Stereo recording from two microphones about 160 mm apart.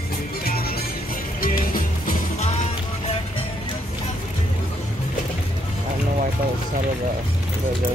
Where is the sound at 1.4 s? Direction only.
60° left (ahead or behind).